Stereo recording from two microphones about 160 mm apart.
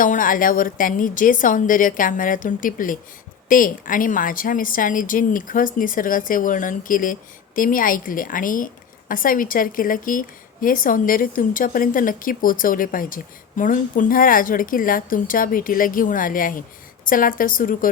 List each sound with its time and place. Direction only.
0.0 s a woman's voice: 55° left (ahead or behind)